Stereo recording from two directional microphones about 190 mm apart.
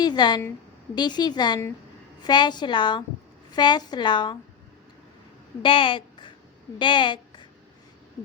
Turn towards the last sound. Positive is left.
turn(degrees=25)  # may be behind; listen again after turning